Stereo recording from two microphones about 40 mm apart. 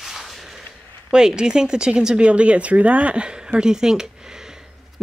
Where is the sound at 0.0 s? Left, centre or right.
Centre.